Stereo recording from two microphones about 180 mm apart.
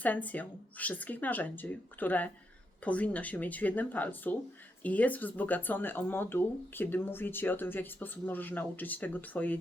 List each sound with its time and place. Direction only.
0.0 s speech: 10° left (ahead or behind)